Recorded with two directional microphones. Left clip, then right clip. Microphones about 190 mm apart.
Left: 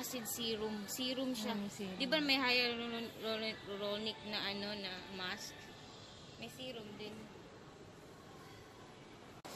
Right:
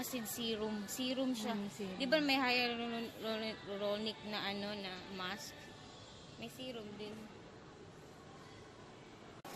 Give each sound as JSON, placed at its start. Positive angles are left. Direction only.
{"t": 0.1, "sound": "speech", "side_deg": -50}
{"t": 6.4, "sound": "speech", "side_deg": -50}